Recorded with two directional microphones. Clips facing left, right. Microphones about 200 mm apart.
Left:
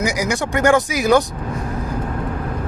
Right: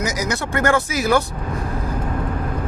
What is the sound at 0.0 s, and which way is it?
Speech, 15° left (ahead or behind).